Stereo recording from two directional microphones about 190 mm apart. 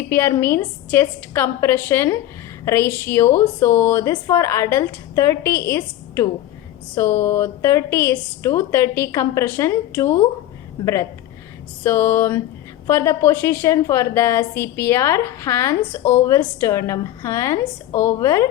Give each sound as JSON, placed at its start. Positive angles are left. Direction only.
{"t": 0.1, "sound": "a woman's voice", "side_deg": 10}
{"t": 11.8, "sound": "a woman's voice", "side_deg": 10}